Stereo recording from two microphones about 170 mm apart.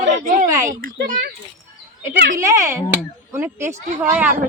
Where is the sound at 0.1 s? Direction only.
50° right (ahead or behind).